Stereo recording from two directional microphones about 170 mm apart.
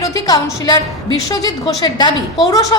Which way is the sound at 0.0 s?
20° left (ahead or behind).